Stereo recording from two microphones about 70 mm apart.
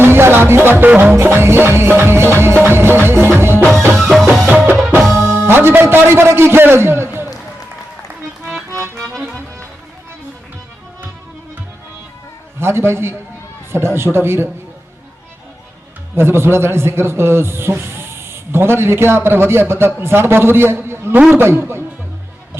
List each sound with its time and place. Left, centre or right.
0.0 s music: right
1.1 s a man's voice: right
2.6 s music: right
3.9 s music: centre
5.1 s a man's voice: right
9.1 s music: centre
12.5 s a man's voice: right
16.1 s a man's voice: right